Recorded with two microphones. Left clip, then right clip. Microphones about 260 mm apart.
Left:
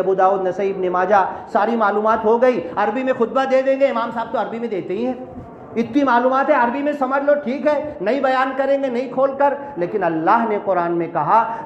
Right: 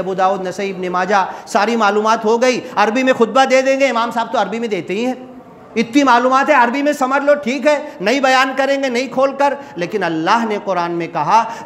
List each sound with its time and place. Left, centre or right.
0.0 s a man's voice: right